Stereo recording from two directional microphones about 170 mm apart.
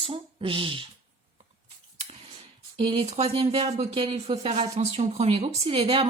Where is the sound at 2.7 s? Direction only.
30° right (ahead or behind).